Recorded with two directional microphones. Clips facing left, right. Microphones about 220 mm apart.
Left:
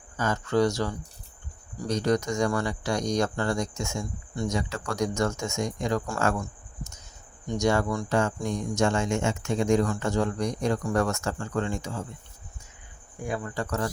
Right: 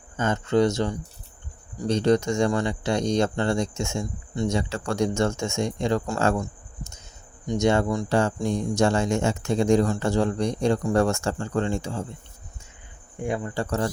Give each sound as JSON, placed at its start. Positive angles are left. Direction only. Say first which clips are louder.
{"t": 0.2, "sound": "speech", "louder": "right 3 dB", "side_deg": -25}
{"t": 8.1, "sound": "speech", "louder": "right 3 dB", "side_deg": -30}
{"t": 13.2, "sound": "speech", "louder": "right 4 dB", "side_deg": -25}